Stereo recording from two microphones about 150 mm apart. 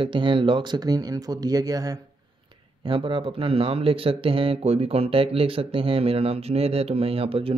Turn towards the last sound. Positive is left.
turn(degrees=-40)  # may be behind; listen again after turning